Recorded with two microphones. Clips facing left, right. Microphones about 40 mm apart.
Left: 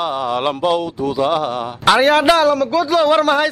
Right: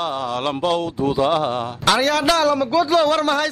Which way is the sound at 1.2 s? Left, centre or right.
Centre.